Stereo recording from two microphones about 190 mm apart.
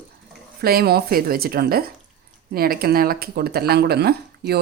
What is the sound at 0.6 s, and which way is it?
Speech, 55° right (ahead or behind).